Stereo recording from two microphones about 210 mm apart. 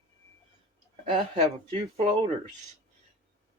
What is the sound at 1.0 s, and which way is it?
Speech, 25° right (ahead or behind).